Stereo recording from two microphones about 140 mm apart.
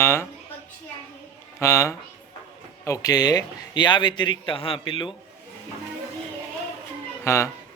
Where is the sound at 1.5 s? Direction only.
20° left (ahead or behind).